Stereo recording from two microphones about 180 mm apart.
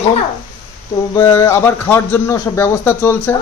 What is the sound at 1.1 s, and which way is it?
Speech, 15° left (ahead or behind).